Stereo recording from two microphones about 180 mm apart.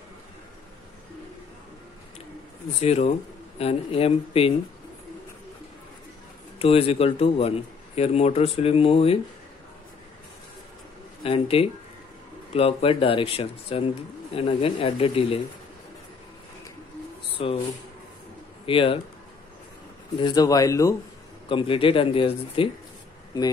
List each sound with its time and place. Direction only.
2.8 s speech: 35° left (ahead or behind)
6.6 s speech: 30° left (ahead or behind)
11.2 s speech: 30° left (ahead or behind)
17.3 s a sound: 30° left (ahead or behind)
18.7 s speech: 30° left (ahead or behind)
20.2 s speech: 25° left (ahead or behind)
21.5 s speech: 30° left (ahead or behind)